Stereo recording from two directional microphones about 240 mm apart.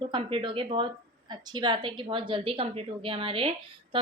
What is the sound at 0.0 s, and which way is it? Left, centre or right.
A woman's voice, right.